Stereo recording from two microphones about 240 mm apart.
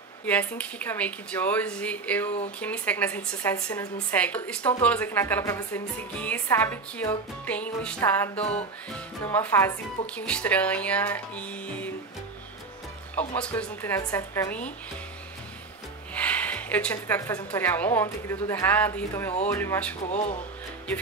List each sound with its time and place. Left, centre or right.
0.2 s a woman's voice: centre
8.4 s speech: left
8.9 s speech: centre
13.3 s a woman's voice: centre
16.2 s a woman's voice: centre
20.1 s speech: left